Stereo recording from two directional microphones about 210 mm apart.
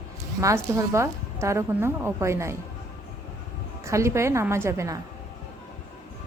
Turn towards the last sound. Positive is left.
turn(degrees=-15)  # may be behind; listen again after turning